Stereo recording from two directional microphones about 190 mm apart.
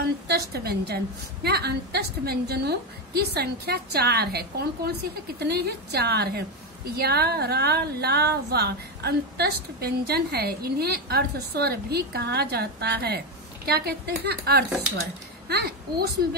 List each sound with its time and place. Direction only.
0.3 s a woman's voice: 55° right (ahead or behind)